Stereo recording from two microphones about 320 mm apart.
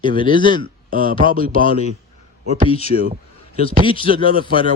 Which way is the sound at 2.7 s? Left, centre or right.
Centre.